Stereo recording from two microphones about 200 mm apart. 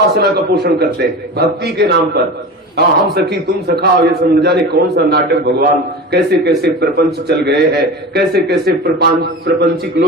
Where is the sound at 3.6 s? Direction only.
50° right (ahead or behind).